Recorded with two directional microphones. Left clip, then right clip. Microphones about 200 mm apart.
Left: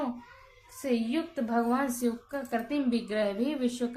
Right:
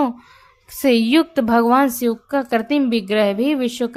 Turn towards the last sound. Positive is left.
turn(degrees=-40)  # may be behind; listen again after turning